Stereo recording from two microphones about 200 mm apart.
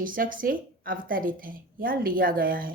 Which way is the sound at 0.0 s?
45° right (ahead or behind).